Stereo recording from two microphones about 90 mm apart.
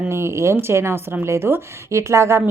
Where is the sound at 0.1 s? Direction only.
30° right (ahead or behind).